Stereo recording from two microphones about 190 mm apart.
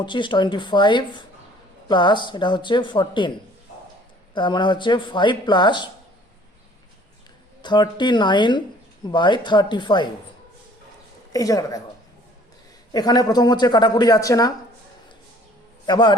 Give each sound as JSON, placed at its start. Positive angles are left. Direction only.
{"t": 0.0, "sound": "speech", "side_deg": 25}
{"t": 4.4, "sound": "speech", "side_deg": 25}
{"t": 7.6, "sound": "speech", "side_deg": 25}
{"t": 11.3, "sound": "speech", "side_deg": 20}
{"t": 12.9, "sound": "speech", "side_deg": 20}
{"t": 15.9, "sound": "speech", "side_deg": 25}